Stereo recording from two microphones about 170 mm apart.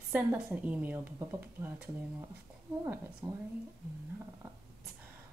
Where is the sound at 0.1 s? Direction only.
10° right (ahead or behind).